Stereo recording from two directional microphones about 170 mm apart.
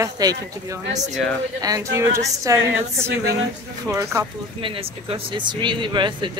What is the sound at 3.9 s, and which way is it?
Speech, 15° right (ahead or behind).